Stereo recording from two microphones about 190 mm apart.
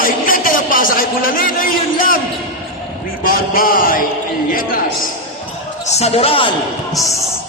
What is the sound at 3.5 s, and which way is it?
Speech, 45° left (ahead or behind).